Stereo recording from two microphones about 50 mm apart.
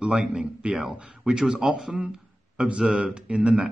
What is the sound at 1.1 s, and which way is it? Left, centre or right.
Speech, centre.